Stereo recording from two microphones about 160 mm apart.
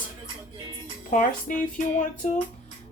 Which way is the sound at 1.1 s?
55° left (ahead or behind).